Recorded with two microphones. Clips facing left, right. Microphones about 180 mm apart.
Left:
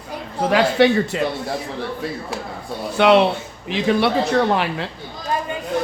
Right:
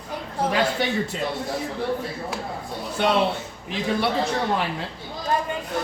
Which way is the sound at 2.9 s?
75° left (ahead or behind).